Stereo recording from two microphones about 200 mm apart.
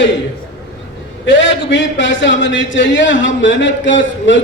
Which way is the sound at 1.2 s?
65° left (ahead or behind).